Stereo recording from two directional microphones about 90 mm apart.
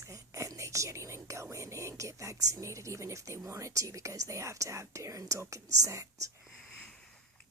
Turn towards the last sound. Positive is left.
turn(degrees=15)  # may be behind; listen again after turning